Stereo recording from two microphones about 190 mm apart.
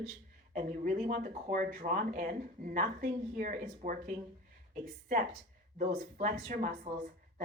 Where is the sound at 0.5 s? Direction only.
45° right (ahead or behind).